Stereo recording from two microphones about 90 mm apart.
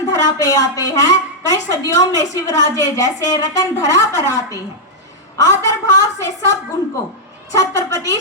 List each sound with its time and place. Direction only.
0.1 s a woman's voice: 40° left (ahead or behind)